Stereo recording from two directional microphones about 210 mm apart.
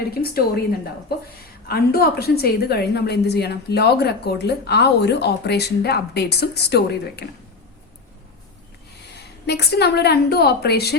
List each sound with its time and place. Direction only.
0.1 s a woman's voice: 45° left (ahead or behind)
1.6 s a woman's voice: 50° left (ahead or behind)
9.1 s a woman's voice: 50° left (ahead or behind)